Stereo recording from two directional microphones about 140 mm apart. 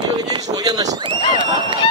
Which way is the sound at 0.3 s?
30° right (ahead or behind).